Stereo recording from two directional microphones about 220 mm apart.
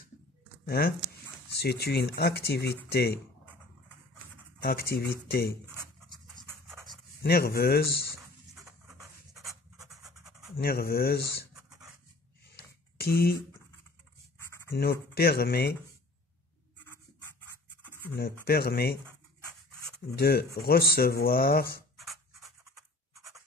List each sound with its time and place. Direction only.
0.7 s speech: 45° left (ahead or behind)
4.6 s speech: 45° left (ahead or behind)
7.2 s speech: 45° left (ahead or behind)
10.1 s scratch: centre (ahead or behind)
10.6 s speech: 45° left (ahead or behind)
12.5 s a sound: 45° left (ahead or behind)
14.7 s speech: 45° left (ahead or behind)
18.4 s speech: 45° left (ahead or behind)
20.2 s speech: 45° left (ahead or behind)
21.9 s a sound: centre (ahead or behind)